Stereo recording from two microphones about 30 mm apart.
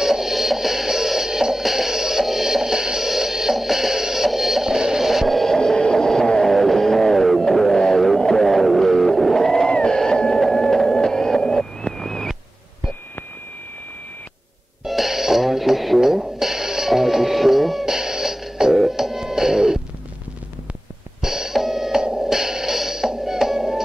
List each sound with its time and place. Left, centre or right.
0.0 s music: centre
4.7 s music: centre
5.0 s radio: centre
5.8 s a sound: centre
6.4 s music: centre
8.5 s music: centre
9.7 s a sound: left
10.5 s music: centre
11.1 s a sound: centre
14.9 s music: centre
21.2 s a sound: centre
22.2 s music: centre